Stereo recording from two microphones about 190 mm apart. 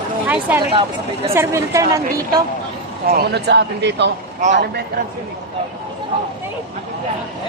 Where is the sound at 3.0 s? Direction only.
55° right (ahead or behind).